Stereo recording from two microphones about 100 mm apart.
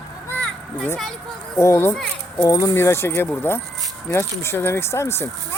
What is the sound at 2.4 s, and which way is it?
Speech, 35° left (ahead or behind).